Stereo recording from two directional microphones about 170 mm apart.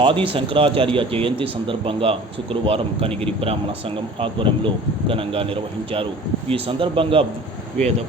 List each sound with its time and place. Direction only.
0.0 s speech: 30° right (ahead or behind)
4.2 s speech: 30° right (ahead or behind)